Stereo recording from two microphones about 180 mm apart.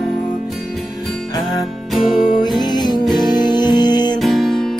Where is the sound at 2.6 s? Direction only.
25° left (ahead or behind).